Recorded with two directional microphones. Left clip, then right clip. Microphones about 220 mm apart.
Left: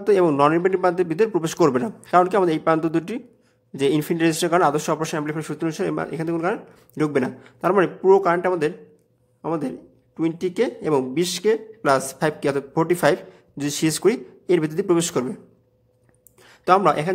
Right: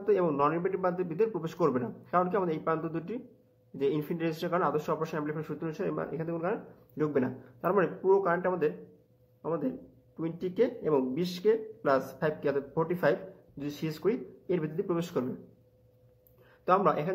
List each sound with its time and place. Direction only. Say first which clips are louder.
0.0 s a man's voice: left 10 dB; 40° left (ahead or behind)
16.4 s speech: left 9 dB; 40° left (ahead or behind)